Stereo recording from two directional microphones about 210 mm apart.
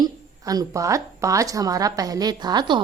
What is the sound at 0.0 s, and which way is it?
A woman's voice, 15° right (ahead or behind).